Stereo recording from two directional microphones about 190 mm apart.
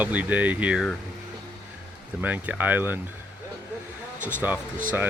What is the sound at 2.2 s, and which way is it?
Speech, 10° right (ahead or behind).